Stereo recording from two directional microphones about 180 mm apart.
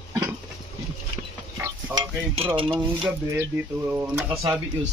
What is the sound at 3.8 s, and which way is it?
Speech, 10° right (ahead or behind).